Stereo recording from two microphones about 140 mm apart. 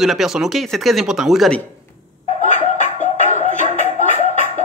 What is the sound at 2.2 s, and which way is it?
Music, 55° left (ahead or behind).